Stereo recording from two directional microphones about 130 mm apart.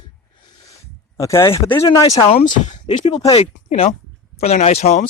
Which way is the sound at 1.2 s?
25° left (ahead or behind).